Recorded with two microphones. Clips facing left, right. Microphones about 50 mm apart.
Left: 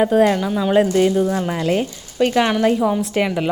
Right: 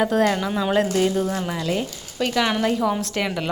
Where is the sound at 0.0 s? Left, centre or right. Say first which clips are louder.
Left 5 dB; centre.